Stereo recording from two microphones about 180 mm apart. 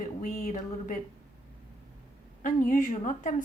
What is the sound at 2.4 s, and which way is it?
A woman's voice, 50° left (ahead or behind).